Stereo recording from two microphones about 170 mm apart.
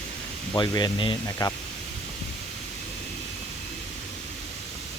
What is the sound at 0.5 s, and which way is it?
Speech, 25° left (ahead or behind).